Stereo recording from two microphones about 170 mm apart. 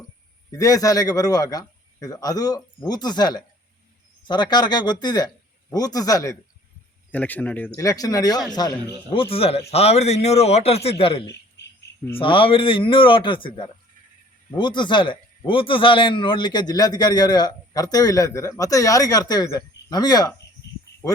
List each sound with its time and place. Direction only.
0.5 s a man's voice: 20° left (ahead or behind)
7.1 s speech: 10° left (ahead or behind)
7.8 s a man's voice: 20° left (ahead or behind)
9.3 s a man's voice: 35° left (ahead or behind)